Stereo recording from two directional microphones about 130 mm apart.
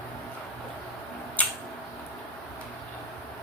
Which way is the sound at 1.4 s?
15° left (ahead or behind).